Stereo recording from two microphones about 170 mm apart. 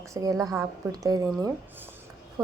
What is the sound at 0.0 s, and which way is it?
A woman's voice, 20° right (ahead or behind).